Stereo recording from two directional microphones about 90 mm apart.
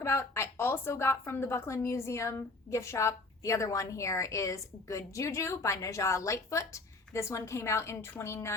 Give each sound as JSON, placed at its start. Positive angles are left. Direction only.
{"t": 0.0, "sound": "a woman's voice", "side_deg": 30}